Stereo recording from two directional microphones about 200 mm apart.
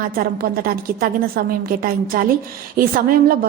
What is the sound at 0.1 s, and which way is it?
A woman's voice, 45° right (ahead or behind).